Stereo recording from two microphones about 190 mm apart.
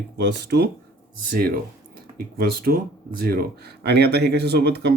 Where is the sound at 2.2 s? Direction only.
55° right (ahead or behind).